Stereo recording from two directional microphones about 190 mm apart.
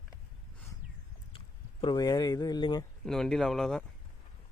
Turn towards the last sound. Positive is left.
turn(degrees=0)  # may be behind; listen again after turning